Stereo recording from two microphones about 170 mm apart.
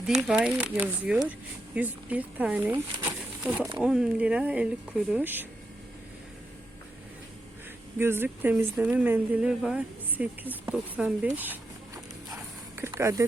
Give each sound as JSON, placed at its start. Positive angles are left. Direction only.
{"t": 0.0, "sound": "speech", "side_deg": 0}
{"t": 7.9, "sound": "speech", "side_deg": -15}
{"t": 12.7, "sound": "a sound", "side_deg": -15}